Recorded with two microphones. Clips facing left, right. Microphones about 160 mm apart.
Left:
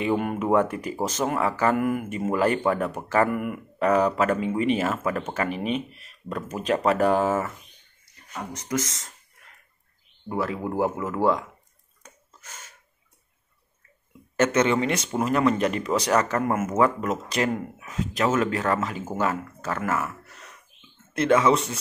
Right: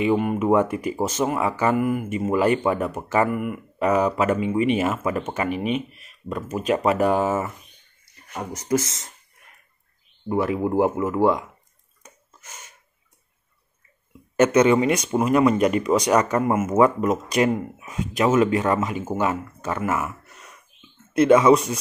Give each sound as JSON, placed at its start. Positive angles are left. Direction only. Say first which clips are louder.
{"t": 0.0, "sound": "speech", "louder": "right 4 dB", "side_deg": -5}
{"t": 1.8, "sound": "speech", "louder": "right 2 dB", "side_deg": -5}
{"t": 8.6, "sound": "speech", "louder": "right 6 dB", "side_deg": -25}
{"t": 10.2, "sound": "speech", "louder": "right 5 dB", "side_deg": -20}
{"t": 12.0, "sound": "a sound", "louder": "right 1 dB", "side_deg": -10}
{"t": 14.3, "sound": "speech", "louder": "right 5 dB", "side_deg": -15}
{"t": 21.2, "sound": "speech", "louder": "right 5 dB", "side_deg": -20}